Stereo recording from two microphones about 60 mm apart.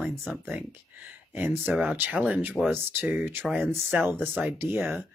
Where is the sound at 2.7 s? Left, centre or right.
Right.